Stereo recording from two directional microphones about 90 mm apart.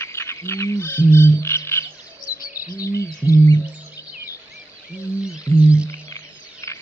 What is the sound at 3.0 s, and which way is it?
Bird, 35° left (ahead or behind).